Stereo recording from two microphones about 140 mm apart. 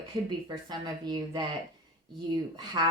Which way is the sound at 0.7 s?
30° right (ahead or behind).